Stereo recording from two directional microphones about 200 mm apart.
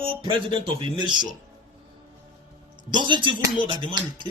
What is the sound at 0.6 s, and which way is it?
Speech, 25° right (ahead or behind).